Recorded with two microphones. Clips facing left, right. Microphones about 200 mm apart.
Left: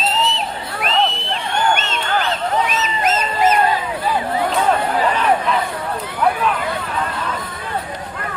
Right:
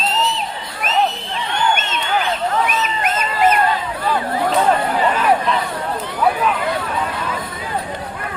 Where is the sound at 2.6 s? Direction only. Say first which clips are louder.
Left 1 dB; 55° right (ahead or behind).